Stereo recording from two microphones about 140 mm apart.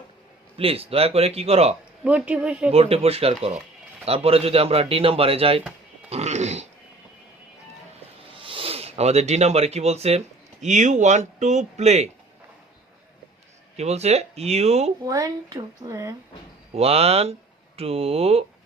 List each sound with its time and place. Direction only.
0.5 s speech: 45° right (ahead or behind)
2.0 s speech: 10° right (ahead or behind)
2.7 s speech: 45° right (ahead or behind)
6.1 s a sound: 50° right (ahead or behind)
8.3 s speech: 40° right (ahead or behind)
13.7 s speech: 50° right (ahead or behind)
15.0 s a woman's voice: 25° right (ahead or behind)
16.7 s speech: 45° right (ahead or behind)